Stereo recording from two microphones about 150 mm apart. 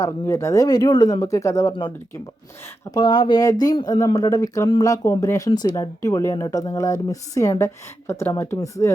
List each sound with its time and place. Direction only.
0.0 s speech: 20° left (ahead or behind)
2.9 s speech: 30° left (ahead or behind)